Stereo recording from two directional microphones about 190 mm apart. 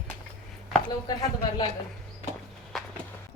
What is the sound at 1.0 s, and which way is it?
Speech, 20° left (ahead or behind).